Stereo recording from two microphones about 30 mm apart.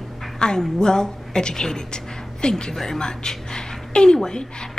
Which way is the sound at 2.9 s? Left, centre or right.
Left.